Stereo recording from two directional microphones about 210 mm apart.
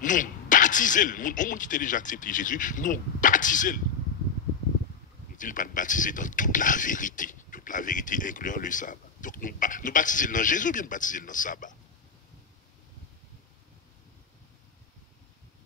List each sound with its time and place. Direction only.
0.0 s speech: 40° left (ahead or behind)
5.4 s speech: 40° left (ahead or behind)